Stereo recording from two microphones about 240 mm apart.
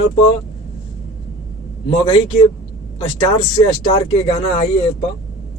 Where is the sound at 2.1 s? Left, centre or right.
Left.